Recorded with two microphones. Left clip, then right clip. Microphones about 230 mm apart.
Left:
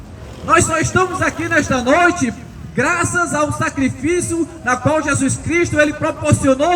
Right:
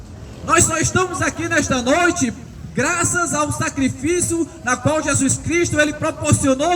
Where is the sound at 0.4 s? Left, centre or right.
Right.